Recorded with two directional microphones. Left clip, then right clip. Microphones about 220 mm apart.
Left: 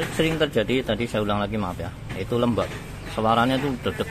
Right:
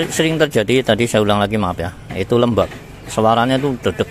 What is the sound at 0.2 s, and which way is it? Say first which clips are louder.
A man's voice: right 6 dB; 30° right (ahead or behind).